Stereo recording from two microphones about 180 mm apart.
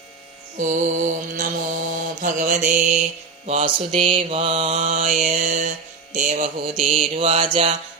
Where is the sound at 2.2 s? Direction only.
45° right (ahead or behind).